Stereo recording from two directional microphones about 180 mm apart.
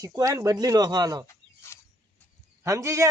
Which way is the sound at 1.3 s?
15° left (ahead or behind).